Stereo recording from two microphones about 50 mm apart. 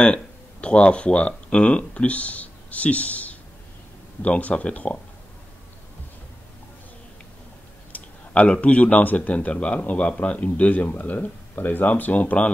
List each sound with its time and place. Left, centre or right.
0.0 s speech: centre
7.9 s speech: left
9.4 s speech: left